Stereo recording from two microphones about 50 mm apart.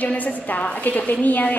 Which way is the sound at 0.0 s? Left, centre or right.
Left.